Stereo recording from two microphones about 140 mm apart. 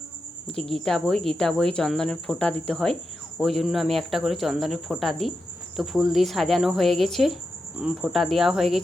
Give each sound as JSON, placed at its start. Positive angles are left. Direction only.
{"t": 0.5, "sound": "speech", "side_deg": 5}